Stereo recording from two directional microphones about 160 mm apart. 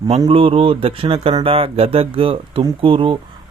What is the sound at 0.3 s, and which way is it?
Speech, 35° right (ahead or behind).